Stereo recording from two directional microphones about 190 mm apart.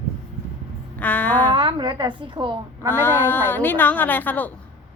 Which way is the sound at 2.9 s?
10° left (ahead or behind).